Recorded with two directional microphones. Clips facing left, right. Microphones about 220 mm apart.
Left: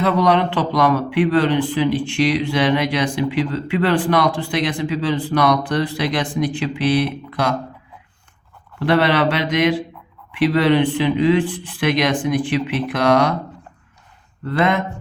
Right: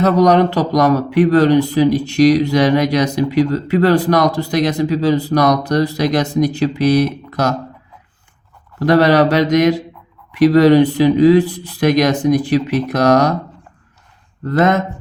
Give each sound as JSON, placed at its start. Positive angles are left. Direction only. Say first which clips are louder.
{"t": 0.0, "sound": "speech", "louder": "right 5 dB", "side_deg": -40}
{"t": 8.8, "sound": "speech", "louder": "right 5 dB", "side_deg": -40}
{"t": 14.4, "sound": "speech", "louder": "right 4 dB", "side_deg": -45}